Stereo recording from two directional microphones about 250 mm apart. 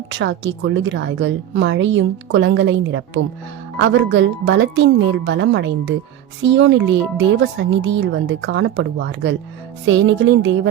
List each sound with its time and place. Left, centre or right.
0.1 s speech: right